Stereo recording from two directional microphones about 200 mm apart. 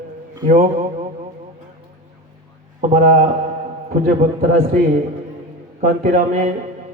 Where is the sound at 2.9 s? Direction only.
40° right (ahead or behind).